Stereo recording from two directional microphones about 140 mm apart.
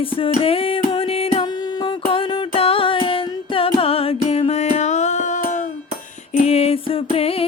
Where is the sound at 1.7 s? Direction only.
40° left (ahead or behind); by 5.7 s 60° left (ahead or behind).